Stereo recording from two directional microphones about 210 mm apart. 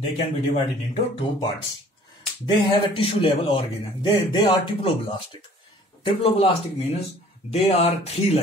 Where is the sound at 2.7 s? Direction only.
25° left (ahead or behind).